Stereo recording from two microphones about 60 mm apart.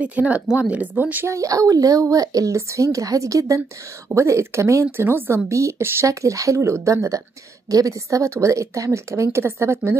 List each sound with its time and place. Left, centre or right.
0.0 s speech: right
1.2 s speech: right
4.1 s speech: right
4.9 s speech: right
5.5 s speech: right
7.7 s speech: right